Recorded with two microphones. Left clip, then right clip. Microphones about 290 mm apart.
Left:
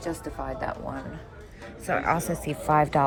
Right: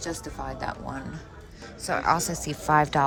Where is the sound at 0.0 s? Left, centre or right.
Right.